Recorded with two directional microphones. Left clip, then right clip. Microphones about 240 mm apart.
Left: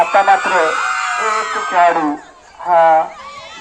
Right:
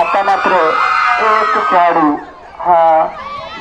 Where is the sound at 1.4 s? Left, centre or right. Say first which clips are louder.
Right 6 dB; left.